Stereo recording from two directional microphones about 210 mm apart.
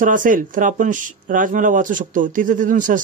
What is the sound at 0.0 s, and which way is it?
Speech, 40° right (ahead or behind).